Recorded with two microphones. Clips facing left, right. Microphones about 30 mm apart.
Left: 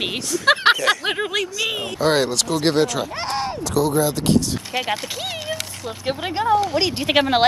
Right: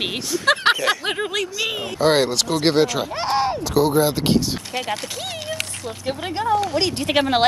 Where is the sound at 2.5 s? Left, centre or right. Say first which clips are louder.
Right 1 dB; centre.